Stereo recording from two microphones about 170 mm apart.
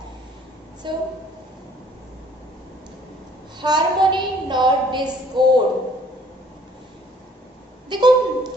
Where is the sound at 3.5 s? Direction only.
25° right (ahead or behind).